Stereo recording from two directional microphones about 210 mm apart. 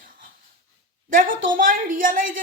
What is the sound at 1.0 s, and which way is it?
Speech, 40° right (ahead or behind).